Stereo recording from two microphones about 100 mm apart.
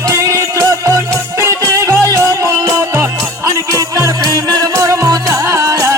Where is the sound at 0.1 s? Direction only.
30° right (ahead or behind).